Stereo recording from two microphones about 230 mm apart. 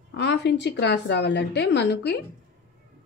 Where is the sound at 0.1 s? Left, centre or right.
Left.